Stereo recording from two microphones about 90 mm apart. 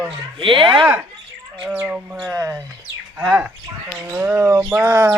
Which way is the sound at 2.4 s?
35° right (ahead or behind).